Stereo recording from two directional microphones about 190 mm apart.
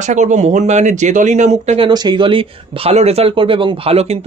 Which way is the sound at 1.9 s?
20° right (ahead or behind).